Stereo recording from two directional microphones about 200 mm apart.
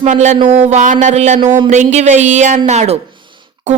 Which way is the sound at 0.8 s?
40° right (ahead or behind).